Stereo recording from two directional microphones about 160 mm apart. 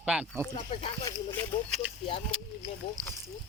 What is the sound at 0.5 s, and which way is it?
Speech, 40° left (ahead or behind).